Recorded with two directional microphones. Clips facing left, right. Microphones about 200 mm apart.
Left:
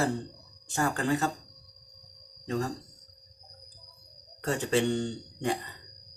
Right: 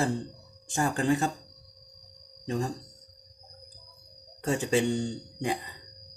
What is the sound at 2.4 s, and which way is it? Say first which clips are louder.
Speech: even; 15° right (ahead or behind).